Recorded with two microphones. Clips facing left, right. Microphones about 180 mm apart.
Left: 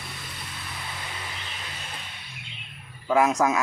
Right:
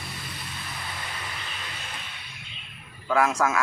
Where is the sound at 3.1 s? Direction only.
20° left (ahead or behind).